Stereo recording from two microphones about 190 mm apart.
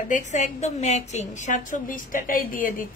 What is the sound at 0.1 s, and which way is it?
A woman's voice, 40° left (ahead or behind).